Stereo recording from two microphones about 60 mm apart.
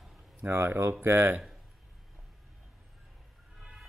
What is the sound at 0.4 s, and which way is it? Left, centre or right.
Speech, right.